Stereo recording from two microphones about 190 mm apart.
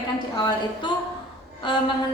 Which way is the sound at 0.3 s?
20° left (ahead or behind).